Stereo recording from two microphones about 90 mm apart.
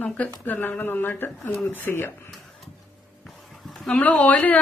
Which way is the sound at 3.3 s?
Centre (ahead or behind).